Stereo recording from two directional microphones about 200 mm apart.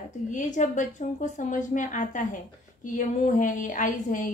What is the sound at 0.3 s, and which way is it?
A woman's voice, 40° left (ahead or behind).